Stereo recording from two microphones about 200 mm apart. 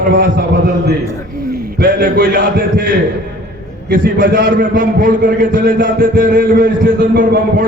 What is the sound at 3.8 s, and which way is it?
A man's voice, 45° right (ahead or behind).